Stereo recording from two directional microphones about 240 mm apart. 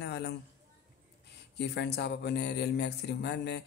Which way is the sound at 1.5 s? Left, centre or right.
Left.